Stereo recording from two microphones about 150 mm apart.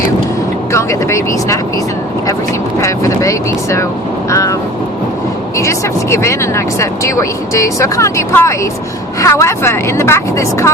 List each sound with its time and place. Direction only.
0.7 s speech: 20° left (ahead or behind)
2.8 s speech: 20° left (ahead or behind)
5.5 s speech: 20° left (ahead or behind)